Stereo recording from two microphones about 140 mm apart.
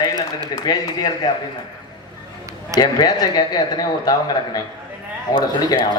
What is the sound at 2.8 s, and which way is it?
Speech, 30° left (ahead or behind).